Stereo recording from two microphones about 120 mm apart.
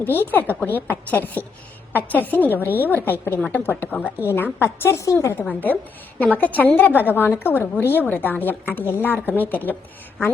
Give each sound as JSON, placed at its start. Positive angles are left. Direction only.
{"t": 0.0, "sound": "a woman's voice", "side_deg": 15}